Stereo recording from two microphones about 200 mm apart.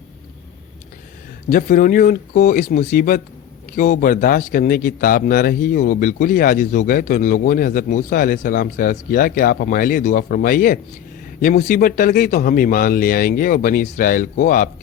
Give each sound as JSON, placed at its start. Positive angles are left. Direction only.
{"t": 1.5, "sound": "speech", "side_deg": 45}